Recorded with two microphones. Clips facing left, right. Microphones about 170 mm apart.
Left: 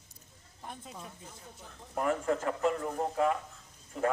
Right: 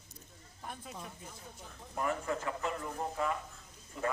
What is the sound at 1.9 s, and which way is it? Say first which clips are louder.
Speech: left 5 dB; 50° left (ahead or behind).